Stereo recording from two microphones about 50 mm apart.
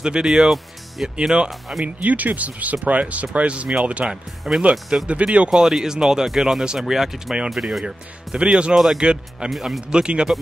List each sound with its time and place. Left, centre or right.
0.0 s speech: centre
2.0 s speech: right
4.1 s speech: centre
5.0 s speech: right
5.5 s speech: centre
7.8 s speech: centre
8.7 s speech: centre
9.0 s speech: centre
9.5 s speech: centre
9.8 s speech: centre